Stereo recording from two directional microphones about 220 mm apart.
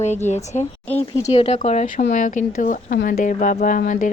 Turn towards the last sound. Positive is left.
turn(degrees=35)  # may be behind; listen again after turning